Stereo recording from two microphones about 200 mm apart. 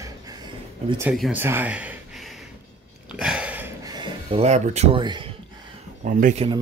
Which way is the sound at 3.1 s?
5° right (ahead or behind).